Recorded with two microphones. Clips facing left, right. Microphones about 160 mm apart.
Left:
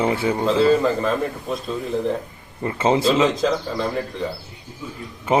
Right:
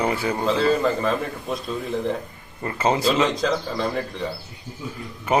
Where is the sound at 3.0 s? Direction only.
Centre (ahead or behind).